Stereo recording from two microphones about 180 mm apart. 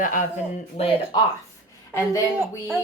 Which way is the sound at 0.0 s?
45° left (ahead or behind).